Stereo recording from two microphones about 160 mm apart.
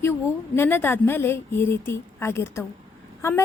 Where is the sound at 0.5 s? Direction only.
15° left (ahead or behind).